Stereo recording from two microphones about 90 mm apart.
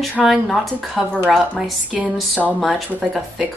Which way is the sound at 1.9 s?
15° right (ahead or behind).